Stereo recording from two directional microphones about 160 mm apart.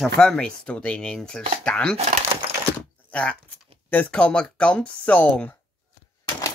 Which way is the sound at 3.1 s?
10° left (ahead or behind).